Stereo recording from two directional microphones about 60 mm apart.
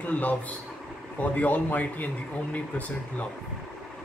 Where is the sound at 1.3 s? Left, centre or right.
Left.